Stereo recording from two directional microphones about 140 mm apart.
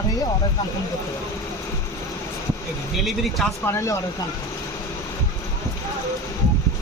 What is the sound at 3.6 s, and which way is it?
Speech, 20° left (ahead or behind).